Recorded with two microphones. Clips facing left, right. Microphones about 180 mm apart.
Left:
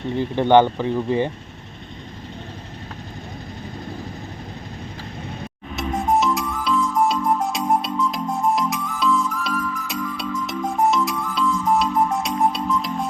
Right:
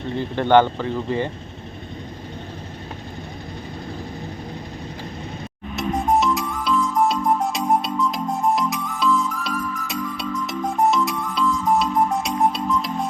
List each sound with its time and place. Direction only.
0.2 s speech: 15° left (ahead or behind)
5.7 s music: centre (ahead or behind)